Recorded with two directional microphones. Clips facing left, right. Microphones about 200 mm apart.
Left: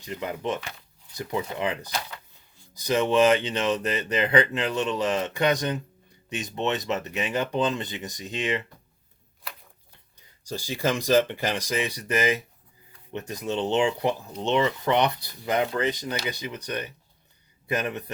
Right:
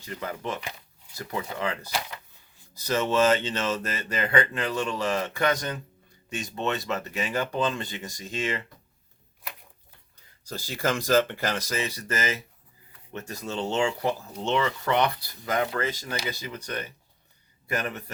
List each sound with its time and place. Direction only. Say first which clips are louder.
0.0 s speech: left 3 dB; 15° left (ahead or behind)
10.4 s speech: left 2 dB; 15° left (ahead or behind)